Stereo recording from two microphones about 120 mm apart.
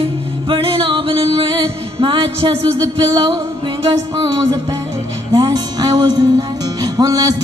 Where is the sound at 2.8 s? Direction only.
30° right (ahead or behind).